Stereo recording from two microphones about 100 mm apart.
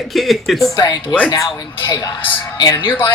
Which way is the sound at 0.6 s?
40° left (ahead or behind).